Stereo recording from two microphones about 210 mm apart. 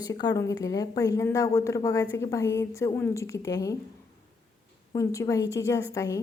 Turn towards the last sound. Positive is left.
turn(degrees=15)  # may be behind; listen again after turning